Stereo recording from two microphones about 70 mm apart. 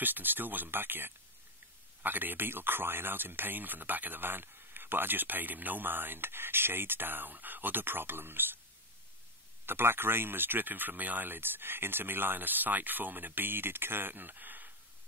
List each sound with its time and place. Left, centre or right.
0.0 s speech: right
9.7 s speech: right